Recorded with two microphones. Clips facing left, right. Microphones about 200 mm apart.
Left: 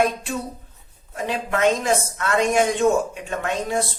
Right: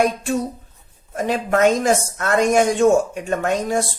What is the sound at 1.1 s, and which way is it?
A woman's voice, 45° right (ahead or behind).